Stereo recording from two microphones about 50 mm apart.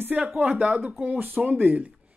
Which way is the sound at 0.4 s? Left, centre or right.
Right.